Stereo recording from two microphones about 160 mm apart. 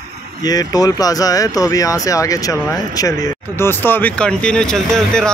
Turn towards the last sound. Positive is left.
turn(degrees=5)  # may be behind; listen again after turning